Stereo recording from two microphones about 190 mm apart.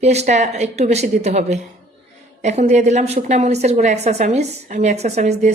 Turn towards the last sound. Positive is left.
turn(degrees=-35)  # may be behind; listen again after turning